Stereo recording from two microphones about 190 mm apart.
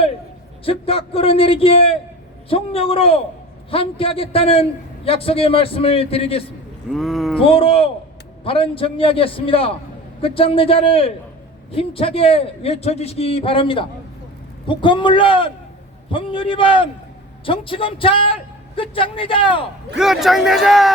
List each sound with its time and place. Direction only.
0.6 s a man's voice: 30° left (ahead or behind)
6.9 s speech: centre (ahead or behind)
7.4 s a man's voice: 30° left (ahead or behind)
20.0 s speech: centre (ahead or behind)